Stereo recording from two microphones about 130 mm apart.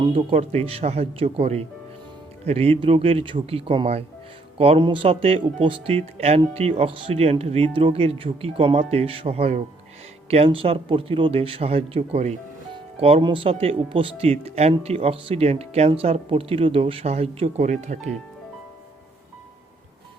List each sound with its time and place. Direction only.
0.0 s speech: 40° right (ahead or behind); by 18.1 s 65° right (ahead or behind)